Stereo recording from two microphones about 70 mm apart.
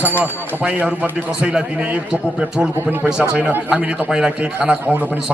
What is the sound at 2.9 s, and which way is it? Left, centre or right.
A man's voice, right.